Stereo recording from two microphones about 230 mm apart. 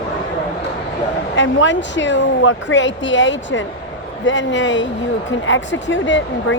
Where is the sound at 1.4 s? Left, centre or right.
Left.